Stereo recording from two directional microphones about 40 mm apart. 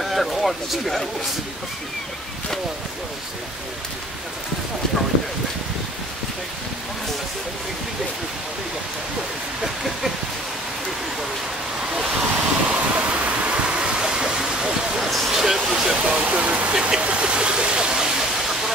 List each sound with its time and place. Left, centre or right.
0.0 s speech: centre
12.0 s wind: right
12.7 s waterfall: right; by 14.7 s centre
15.0 s a sound: centre
15.2 s speech: centre
16.3 s speech: right
16.8 s a sound: right